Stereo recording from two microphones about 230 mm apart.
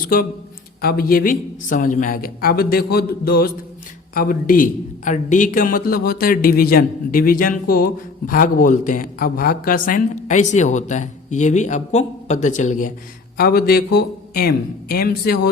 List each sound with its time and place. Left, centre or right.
0.8 s a man's voice: left